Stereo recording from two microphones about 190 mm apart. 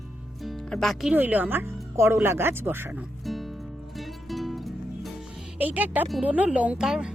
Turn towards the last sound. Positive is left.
turn(degrees=-5)  # may be behind; listen again after turning